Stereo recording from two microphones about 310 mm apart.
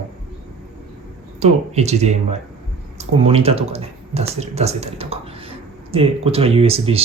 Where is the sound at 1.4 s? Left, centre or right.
Right.